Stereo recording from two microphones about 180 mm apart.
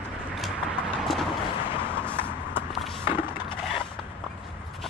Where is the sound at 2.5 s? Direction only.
Centre (ahead or behind).